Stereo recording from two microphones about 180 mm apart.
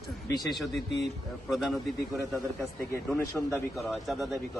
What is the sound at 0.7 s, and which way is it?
Speech, 75° left (ahead or behind).